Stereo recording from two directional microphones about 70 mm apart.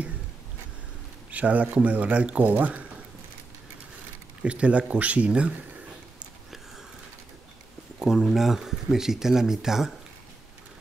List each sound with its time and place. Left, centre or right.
1.3 s speech: right
4.4 s speech: centre
8.0 s speech: centre